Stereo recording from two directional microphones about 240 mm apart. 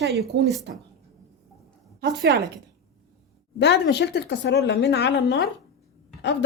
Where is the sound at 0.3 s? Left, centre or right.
Right.